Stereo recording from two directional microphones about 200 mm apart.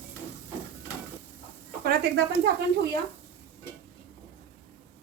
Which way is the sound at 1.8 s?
55° right (ahead or behind).